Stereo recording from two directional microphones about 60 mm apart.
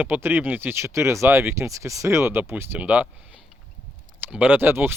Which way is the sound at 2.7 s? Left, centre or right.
Right.